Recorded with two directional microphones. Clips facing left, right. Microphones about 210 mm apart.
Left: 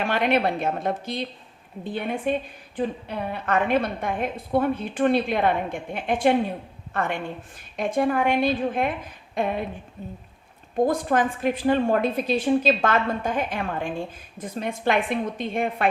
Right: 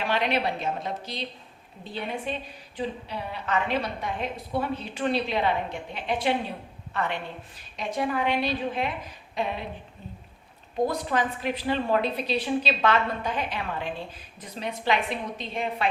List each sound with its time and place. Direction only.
0.0 s a woman's voice: 50° left (ahead or behind)